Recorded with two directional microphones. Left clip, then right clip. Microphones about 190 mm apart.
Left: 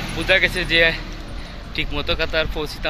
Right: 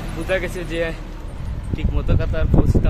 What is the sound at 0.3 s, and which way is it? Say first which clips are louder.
Speech: left 7 dB; 5° right (ahead or behind).